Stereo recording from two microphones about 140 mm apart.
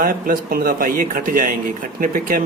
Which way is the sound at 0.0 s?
85° right.